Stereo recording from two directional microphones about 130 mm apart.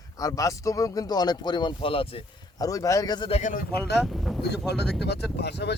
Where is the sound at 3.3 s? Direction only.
75° left (ahead or behind).